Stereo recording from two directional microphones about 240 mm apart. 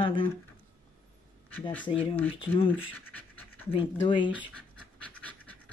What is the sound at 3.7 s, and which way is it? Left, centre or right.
Speech, centre.